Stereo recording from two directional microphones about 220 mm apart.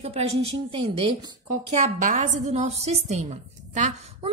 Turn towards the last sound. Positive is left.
turn(degrees=-30)  # may be behind; listen again after turning